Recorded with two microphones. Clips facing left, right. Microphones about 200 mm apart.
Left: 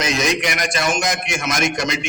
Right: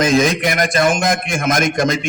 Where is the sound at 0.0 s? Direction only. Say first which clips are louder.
Right 6 dB; 50° right (ahead or behind).